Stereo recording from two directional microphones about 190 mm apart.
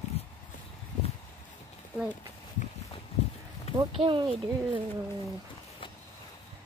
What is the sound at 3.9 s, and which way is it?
Speech, 25° right (ahead or behind).